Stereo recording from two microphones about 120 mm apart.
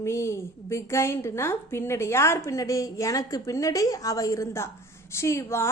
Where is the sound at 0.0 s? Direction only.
25° left (ahead or behind).